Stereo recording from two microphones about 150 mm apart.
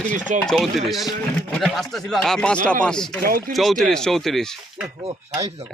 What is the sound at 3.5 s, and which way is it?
Speech, centre (ahead or behind).